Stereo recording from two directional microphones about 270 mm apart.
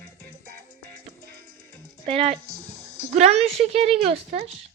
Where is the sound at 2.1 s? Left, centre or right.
Right.